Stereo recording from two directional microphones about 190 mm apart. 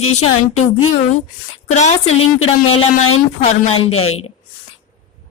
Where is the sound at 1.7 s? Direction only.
35° left (ahead or behind).